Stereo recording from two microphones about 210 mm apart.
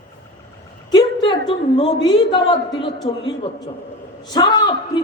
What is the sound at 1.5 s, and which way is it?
A woman's voice, 25° left (ahead or behind).